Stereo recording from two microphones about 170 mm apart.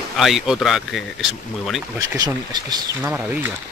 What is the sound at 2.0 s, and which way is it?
Speech, 25° right (ahead or behind).